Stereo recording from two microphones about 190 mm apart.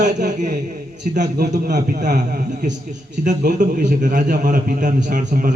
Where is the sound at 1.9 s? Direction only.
45° right (ahead or behind).